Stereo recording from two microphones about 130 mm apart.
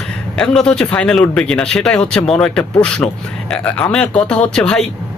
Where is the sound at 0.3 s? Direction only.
5° left (ahead or behind).